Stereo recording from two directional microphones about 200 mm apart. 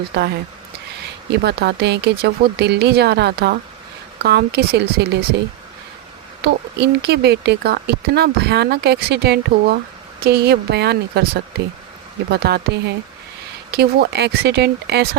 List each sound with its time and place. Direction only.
0.1 s speech: 55° right (ahead or behind)
6.4 s a woman's voice: 55° right (ahead or behind)
12.3 s speech: 55° right (ahead or behind)